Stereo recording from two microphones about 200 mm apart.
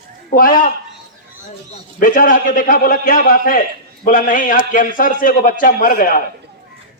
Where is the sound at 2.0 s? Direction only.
40° left (ahead or behind).